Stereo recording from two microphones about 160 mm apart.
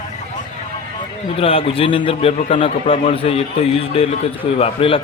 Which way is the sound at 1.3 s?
35° left (ahead or behind).